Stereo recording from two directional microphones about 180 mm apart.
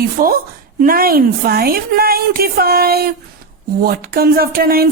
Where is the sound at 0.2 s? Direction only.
50° right (ahead or behind).